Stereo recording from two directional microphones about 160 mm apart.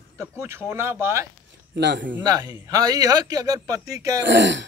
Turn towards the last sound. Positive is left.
turn(degrees=-90)